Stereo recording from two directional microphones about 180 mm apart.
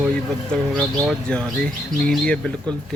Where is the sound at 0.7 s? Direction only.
5° left (ahead or behind).